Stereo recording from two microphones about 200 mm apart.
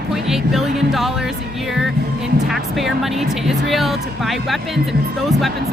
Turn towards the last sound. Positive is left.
turn(degrees=0)  # may be behind; listen again after turning